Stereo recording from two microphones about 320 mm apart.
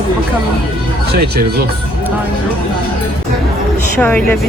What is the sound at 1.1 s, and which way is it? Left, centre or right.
Speech, right.